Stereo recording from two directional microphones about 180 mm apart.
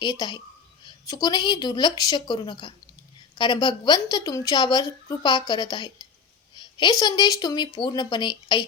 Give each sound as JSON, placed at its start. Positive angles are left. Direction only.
{"t": 0.0, "sound": "a woman's voice", "side_deg": 25}
{"t": 6.6, "sound": "a sound", "side_deg": 25}
{"t": 7.0, "sound": "a woman's voice", "side_deg": 20}